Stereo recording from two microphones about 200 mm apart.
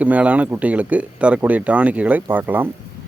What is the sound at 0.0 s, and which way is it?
Speech, 5° right (ahead or behind).